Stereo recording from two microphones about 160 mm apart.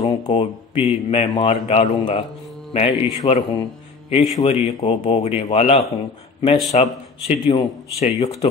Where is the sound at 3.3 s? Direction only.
35° left (ahead or behind).